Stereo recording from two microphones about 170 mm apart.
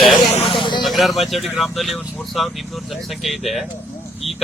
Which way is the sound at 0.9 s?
Centre (ahead or behind).